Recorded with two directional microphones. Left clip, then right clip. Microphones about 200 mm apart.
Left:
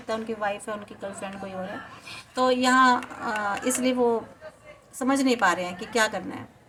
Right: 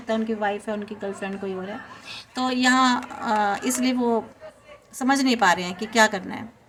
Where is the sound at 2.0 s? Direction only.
40° right (ahead or behind).